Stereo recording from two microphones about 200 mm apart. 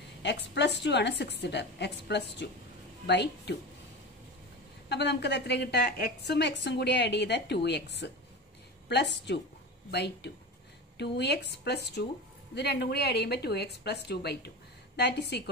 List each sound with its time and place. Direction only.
0.2 s a woman's voice: 60° left (ahead or behind)
4.8 s a woman's voice: 55° left (ahead or behind)